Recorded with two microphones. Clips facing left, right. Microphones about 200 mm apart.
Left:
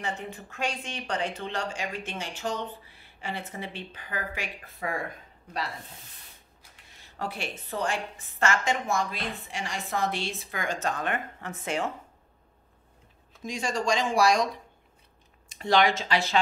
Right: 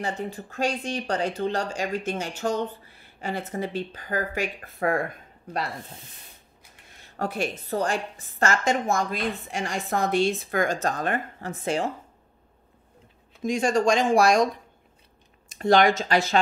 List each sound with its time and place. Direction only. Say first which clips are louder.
0.0 s speech: right 5 dB; 35° right (ahead or behind); by 5.0 s 55° right (ahead or behind)
7.2 s a woman's voice: right 7 dB; 45° right (ahead or behind)
13.4 s a woman's voice: right 8 dB; 50° right (ahead or behind)